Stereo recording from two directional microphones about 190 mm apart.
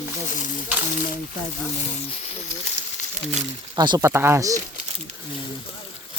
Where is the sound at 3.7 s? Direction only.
20° right (ahead or behind).